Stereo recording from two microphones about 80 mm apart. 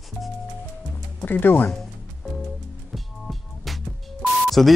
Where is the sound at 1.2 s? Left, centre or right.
Left.